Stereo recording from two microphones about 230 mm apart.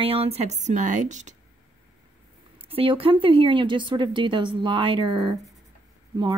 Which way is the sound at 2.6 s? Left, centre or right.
Right.